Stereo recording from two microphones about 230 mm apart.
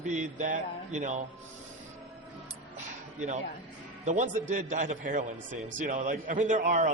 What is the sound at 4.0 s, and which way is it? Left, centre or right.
A man's voice, right.